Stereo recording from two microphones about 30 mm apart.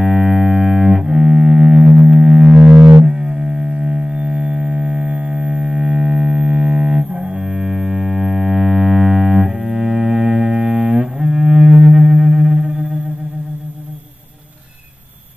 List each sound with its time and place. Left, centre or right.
0.0 s double bass: right
2.0 s music: right